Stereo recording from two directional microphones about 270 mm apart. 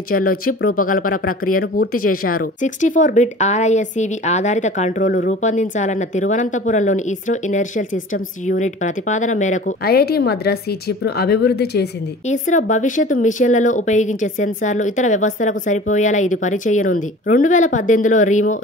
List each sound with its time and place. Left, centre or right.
0.1 s speech: left